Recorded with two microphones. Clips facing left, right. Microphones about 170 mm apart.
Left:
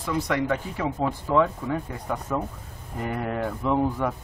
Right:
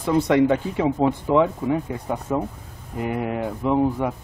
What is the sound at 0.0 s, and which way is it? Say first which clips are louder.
Speech: right 8 dB; 25° right (ahead or behind).